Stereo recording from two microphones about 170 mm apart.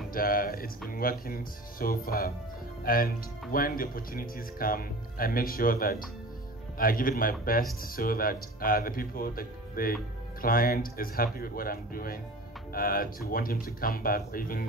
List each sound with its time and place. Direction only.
0.1 s speech: 55° left (ahead or behind)